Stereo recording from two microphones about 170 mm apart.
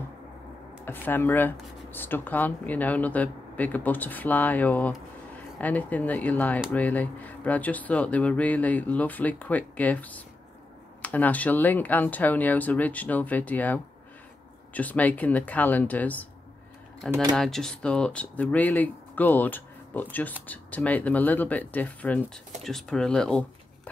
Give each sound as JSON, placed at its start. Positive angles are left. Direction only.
{"t": 0.8, "sound": "speech", "side_deg": 10}
{"t": 17.1, "sound": "speech", "side_deg": -20}
{"t": 17.4, "sound": "speech", "side_deg": 0}